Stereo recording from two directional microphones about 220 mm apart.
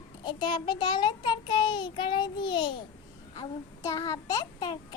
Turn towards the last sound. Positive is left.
turn(degrees=20)  # may be behind; listen again after turning